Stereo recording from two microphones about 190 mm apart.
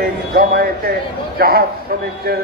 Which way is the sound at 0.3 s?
50° right (ahead or behind).